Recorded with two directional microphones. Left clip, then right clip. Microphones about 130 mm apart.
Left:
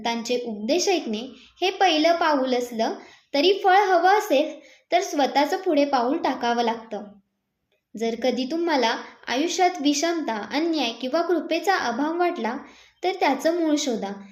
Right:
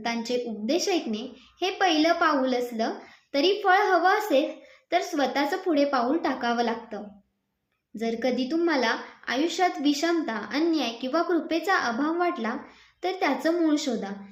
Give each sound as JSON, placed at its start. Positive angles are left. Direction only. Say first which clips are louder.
{"t": 0.0, "sound": "a woman's voice", "louder": "left 3 dB", "side_deg": 25}